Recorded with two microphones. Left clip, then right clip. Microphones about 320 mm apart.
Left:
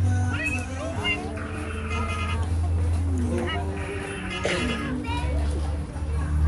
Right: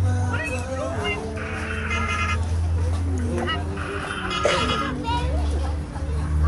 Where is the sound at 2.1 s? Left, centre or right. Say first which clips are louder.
Right 6 dB; right.